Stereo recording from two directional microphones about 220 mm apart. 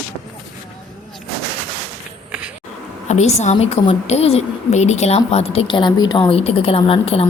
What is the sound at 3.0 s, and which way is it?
A woman's voice, 30° left (ahead or behind).